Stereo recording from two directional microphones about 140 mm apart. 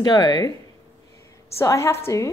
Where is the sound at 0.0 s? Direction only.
30° left (ahead or behind).